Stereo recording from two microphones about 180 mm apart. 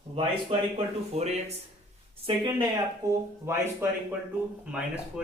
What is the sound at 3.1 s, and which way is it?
Speech, 15° right (ahead or behind).